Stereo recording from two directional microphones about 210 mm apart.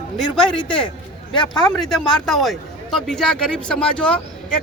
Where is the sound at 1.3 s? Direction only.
20° left (ahead or behind).